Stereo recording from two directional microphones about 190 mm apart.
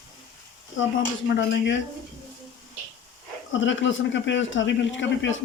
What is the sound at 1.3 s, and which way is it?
Speech, 70° left (ahead or behind).